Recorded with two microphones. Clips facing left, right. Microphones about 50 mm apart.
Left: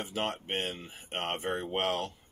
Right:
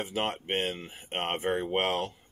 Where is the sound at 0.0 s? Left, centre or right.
Right.